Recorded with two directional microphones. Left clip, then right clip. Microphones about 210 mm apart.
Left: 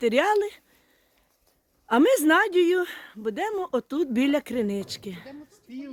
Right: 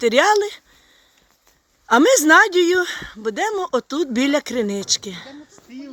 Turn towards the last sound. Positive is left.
turn(degrees=0)  # may be behind; listen again after turning